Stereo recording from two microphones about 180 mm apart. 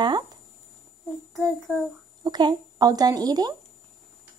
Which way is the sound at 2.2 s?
25° right (ahead or behind).